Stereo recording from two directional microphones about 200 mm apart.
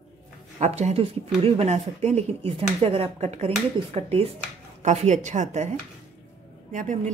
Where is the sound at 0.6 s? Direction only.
35° right (ahead or behind).